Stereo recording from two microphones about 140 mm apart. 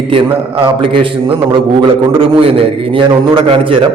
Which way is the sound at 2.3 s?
40° right (ahead or behind).